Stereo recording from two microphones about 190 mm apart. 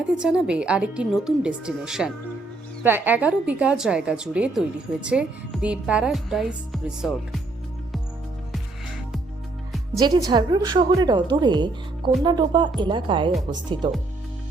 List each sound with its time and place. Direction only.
0.2 s a woman's voice: 5° right (ahead or behind)
10.0 s a woman's voice: 20° right (ahead or behind)